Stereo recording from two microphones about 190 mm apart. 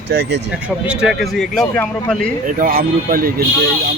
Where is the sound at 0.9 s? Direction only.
5° right (ahead or behind).